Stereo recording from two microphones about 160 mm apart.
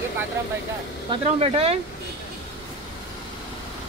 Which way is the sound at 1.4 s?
35° right (ahead or behind).